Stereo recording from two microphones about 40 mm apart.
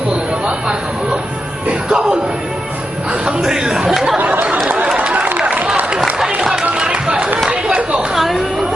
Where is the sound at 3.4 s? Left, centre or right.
Centre.